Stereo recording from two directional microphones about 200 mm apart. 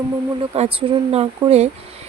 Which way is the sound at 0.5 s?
30° right (ahead or behind).